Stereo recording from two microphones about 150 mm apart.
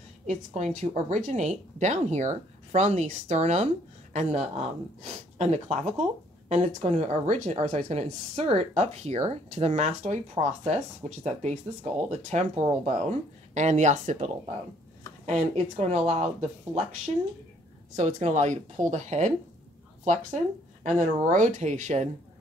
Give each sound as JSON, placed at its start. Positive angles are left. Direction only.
{"t": 0.6, "sound": "speech", "side_deg": -50}
{"t": 20.8, "sound": "speech", "side_deg": -55}